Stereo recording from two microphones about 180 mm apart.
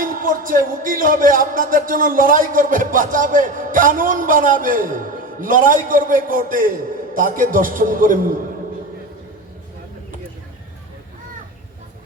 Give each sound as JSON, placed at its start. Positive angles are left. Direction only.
{"t": 0.0, "sound": "speech", "side_deg": -50}